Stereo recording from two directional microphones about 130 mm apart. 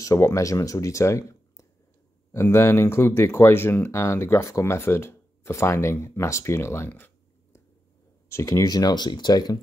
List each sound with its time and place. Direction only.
0.0 s speech: 25° left (ahead or behind)
8.3 s speech: 20° left (ahead or behind)